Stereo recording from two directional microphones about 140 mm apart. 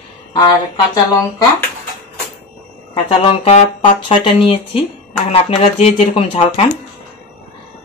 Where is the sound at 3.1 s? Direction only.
45° left (ahead or behind).